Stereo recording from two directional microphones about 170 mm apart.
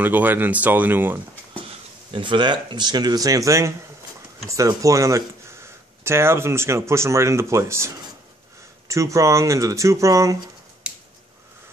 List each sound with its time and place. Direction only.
0.0 s speech: 10° right (ahead or behind)
2.1 s speech: 30° right (ahead or behind)